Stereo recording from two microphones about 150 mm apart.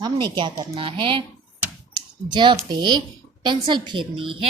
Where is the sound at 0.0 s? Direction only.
30° right (ahead or behind).